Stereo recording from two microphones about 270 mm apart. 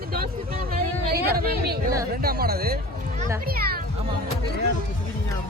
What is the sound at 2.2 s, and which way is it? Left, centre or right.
A child's voice, right.